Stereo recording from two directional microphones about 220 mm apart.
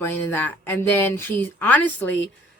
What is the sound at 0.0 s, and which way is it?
Speech, 10° left (ahead or behind).